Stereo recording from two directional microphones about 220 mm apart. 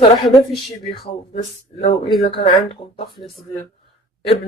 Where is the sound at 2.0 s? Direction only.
Centre (ahead or behind).